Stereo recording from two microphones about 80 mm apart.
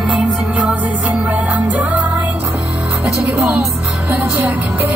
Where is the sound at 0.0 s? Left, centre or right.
Centre.